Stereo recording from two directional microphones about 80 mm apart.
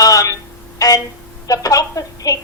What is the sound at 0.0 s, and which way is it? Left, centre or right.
Telephone, left.